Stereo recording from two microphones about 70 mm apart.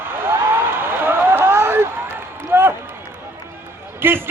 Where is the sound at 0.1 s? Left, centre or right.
Right.